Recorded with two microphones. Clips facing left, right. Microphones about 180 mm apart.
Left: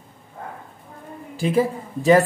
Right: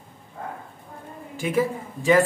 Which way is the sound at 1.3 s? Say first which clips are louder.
Left 3 dB; 30° left (ahead or behind).